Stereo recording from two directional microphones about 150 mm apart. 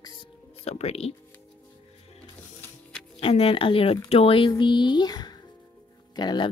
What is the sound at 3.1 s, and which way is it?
A woman's voice, 40° left (ahead or behind).